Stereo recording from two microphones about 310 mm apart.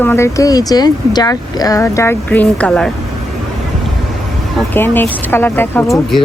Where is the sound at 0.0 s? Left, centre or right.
Centre.